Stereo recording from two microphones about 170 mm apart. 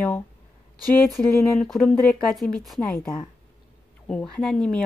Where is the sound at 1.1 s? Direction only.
Centre (ahead or behind).